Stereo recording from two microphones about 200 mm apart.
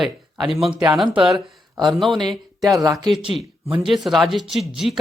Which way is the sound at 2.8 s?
20° right (ahead or behind).